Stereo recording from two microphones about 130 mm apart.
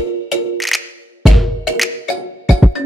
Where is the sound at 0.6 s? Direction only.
Centre (ahead or behind).